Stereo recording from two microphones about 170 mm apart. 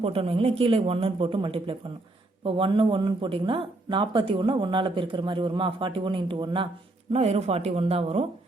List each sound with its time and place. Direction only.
0.0 s speech: 35° right (ahead or behind)